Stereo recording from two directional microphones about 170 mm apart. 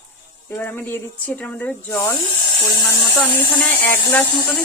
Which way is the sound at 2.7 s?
20° left (ahead or behind).